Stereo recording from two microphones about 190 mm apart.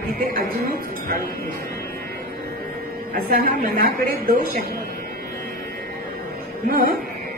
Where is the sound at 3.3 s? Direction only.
50° right (ahead or behind).